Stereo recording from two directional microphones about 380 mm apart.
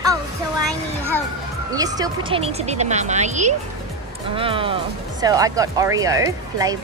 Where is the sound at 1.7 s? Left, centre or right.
Centre.